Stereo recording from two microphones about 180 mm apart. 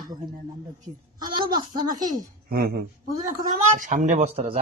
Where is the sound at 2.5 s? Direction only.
55° right (ahead or behind).